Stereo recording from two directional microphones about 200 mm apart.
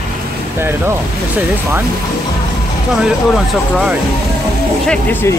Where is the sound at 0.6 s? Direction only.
10° right (ahead or behind).